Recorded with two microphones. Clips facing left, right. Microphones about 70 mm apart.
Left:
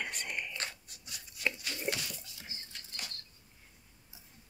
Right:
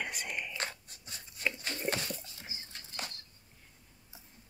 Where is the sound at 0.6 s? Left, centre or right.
Right.